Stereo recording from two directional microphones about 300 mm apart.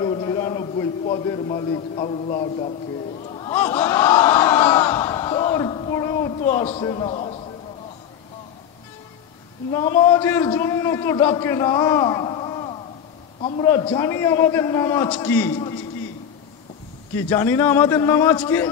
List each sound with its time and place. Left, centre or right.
0.0 s a sound: centre
3.3 s crowd: centre
9.7 s a man's voice: centre
17.1 s a man's voice: centre